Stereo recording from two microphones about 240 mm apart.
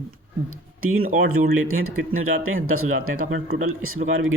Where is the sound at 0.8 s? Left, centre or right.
Right.